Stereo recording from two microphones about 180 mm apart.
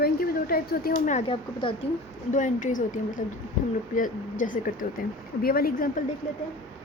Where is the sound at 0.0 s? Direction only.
55° left (ahead or behind).